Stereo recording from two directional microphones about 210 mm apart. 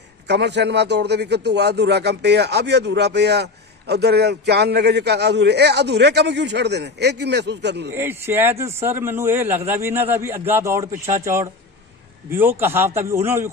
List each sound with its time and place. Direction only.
0.3 s a man's voice: 55° right (ahead or behind)
7.9 s a man's voice: 10° right (ahead or behind)